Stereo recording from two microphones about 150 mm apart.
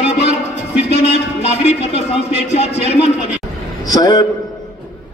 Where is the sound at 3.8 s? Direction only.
25° left (ahead or behind).